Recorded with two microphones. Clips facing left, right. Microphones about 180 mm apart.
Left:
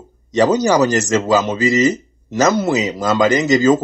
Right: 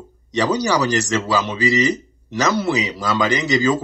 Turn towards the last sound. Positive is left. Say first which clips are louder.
# left 5 dB
turn(degrees=45)  # may be behind; listen again after turning